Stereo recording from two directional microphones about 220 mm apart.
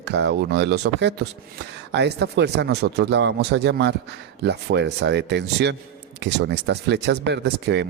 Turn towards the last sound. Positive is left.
turn(degrees=-50)  # may be behind; listen again after turning